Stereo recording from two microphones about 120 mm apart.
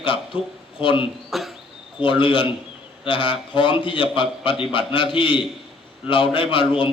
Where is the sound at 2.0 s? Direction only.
45° left (ahead or behind).